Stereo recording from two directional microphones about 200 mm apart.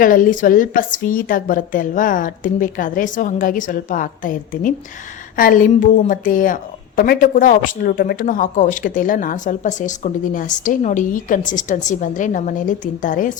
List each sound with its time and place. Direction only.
0.0 s a woman's voice: 40° left (ahead or behind)